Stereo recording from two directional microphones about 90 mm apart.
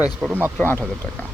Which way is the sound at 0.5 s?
20° left (ahead or behind).